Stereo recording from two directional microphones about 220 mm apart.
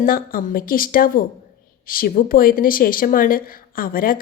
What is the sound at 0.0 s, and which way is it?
A woman's voice, 40° left (ahead or behind).